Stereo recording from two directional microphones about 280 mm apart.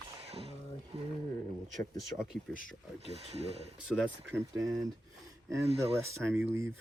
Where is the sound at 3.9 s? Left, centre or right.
Centre.